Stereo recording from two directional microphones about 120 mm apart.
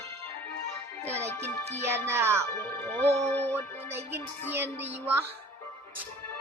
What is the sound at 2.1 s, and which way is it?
Speech, 20° right (ahead or behind).